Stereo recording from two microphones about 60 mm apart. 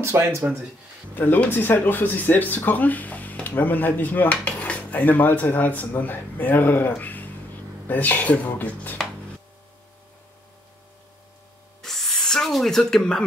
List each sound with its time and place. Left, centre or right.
0.0 s speech: right
1.1 s speech: left
7.0 s a sound: left
7.9 s speech: left
11.8 s spray: centre